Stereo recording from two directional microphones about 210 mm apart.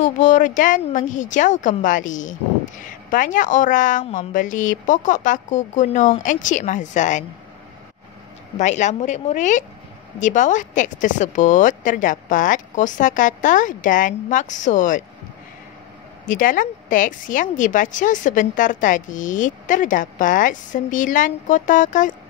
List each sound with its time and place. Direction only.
0.0 s a woman's voice: 35° left (ahead or behind)
8.5 s speech: 35° left (ahead or behind)
16.3 s speech: 40° left (ahead or behind)